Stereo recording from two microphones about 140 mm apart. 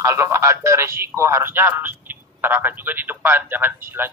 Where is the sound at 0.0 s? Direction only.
20° right (ahead or behind).